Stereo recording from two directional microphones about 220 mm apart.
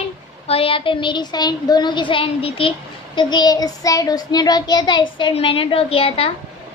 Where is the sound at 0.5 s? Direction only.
25° left (ahead or behind).